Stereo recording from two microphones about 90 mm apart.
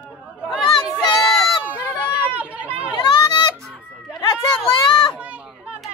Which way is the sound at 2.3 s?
15° right (ahead or behind).